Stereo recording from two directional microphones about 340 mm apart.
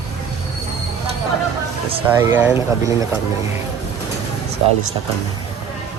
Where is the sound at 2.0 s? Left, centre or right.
Centre.